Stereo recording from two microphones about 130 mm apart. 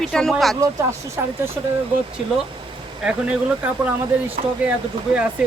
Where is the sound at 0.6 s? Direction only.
20° right (ahead or behind).